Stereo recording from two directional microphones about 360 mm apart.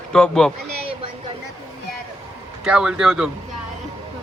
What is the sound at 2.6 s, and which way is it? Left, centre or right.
Speech, centre.